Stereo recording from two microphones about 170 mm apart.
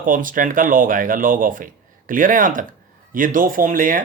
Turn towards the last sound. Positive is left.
turn(degrees=-55)  # may be behind; listen again after turning